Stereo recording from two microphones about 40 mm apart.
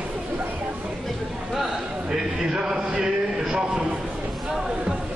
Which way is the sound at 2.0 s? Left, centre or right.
Centre.